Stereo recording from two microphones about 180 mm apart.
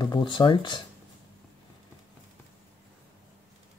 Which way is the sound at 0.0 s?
25° left (ahead or behind).